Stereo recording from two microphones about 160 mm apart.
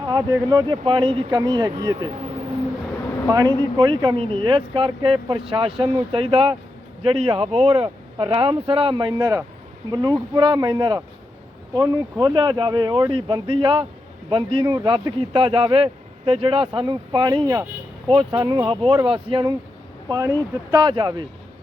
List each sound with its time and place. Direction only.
0.0 s speech: 25° right (ahead or behind)
3.2 s speech: 25° right (ahead or behind)